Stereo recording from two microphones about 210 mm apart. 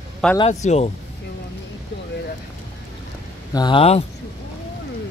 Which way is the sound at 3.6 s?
25° left (ahead or behind).